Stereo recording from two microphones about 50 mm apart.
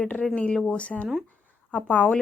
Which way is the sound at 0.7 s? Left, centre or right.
Left.